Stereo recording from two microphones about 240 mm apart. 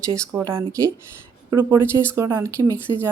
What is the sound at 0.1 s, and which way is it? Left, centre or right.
Speech, centre.